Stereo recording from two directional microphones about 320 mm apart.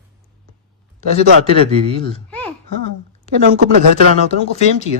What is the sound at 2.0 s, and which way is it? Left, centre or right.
Speech, centre.